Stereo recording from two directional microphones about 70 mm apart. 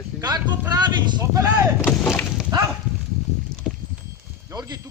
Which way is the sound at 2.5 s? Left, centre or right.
Right.